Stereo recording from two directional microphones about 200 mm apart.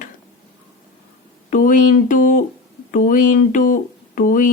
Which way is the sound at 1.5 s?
40° left (ahead or behind).